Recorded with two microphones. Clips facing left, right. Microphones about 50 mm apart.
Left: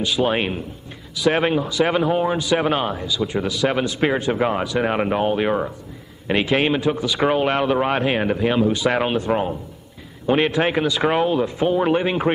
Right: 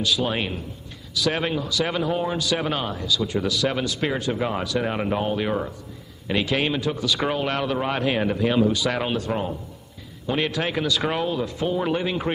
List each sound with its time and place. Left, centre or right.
0.0 s a man's voice: left